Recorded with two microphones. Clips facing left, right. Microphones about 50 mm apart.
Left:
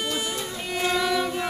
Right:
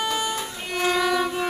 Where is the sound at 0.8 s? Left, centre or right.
Centre.